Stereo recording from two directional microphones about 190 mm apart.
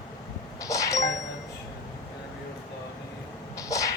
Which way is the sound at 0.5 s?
15° left (ahead or behind).